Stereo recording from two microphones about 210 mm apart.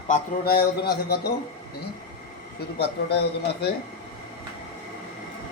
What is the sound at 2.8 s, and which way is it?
Speech, 50° left (ahead or behind).